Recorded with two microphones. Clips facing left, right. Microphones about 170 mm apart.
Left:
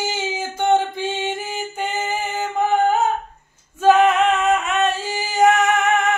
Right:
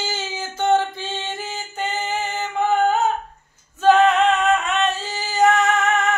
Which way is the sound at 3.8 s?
10° left (ahead or behind).